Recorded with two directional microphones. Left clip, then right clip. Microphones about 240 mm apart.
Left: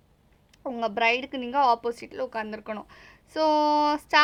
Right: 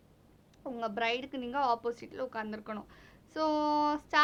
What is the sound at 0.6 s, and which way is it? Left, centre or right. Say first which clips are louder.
A woman's voice: left 9 dB; left.